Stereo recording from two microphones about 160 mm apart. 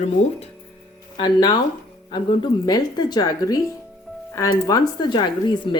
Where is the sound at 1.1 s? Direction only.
25° left (ahead or behind).